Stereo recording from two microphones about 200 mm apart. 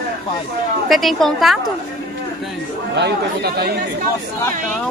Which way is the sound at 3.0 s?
55° right (ahead or behind).